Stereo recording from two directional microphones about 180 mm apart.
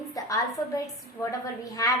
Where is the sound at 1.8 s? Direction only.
20° left (ahead or behind).